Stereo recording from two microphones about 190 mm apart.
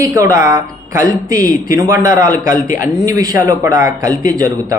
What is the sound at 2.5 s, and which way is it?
Speech, 45° left (ahead or behind).